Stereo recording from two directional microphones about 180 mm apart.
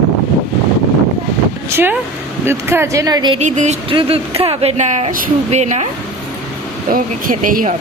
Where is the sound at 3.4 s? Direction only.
40° right (ahead or behind).